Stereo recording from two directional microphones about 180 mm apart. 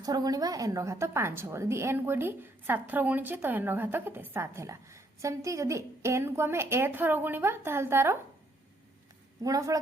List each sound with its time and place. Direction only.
0.0 s a woman's voice: 20° right (ahead or behind)
9.4 s a woman's voice: 20° right (ahead or behind)